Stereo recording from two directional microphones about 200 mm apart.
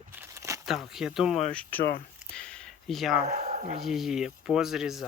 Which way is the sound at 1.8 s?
50° left (ahead or behind).